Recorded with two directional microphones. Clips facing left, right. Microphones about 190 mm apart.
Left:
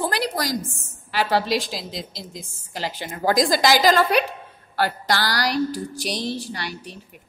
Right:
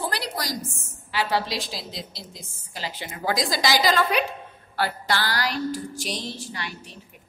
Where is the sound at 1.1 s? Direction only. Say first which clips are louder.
Left 4 dB; 45° left (ahead or behind).